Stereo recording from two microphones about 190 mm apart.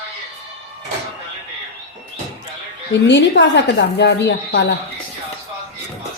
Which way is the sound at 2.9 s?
70° left (ahead or behind).